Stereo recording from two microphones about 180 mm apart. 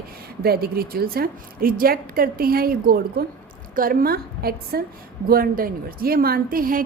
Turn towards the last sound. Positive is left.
turn(degrees=-50)  # may be behind; listen again after turning